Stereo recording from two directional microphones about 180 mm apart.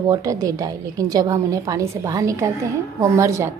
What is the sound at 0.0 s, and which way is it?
A woman's voice, 20° right (ahead or behind).